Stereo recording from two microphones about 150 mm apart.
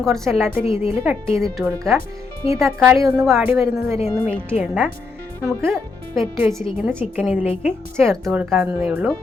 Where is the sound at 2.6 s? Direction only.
Centre (ahead or behind).